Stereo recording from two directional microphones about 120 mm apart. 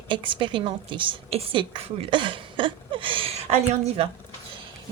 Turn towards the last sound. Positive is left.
turn(degrees=-55)  # may be behind; listen again after turning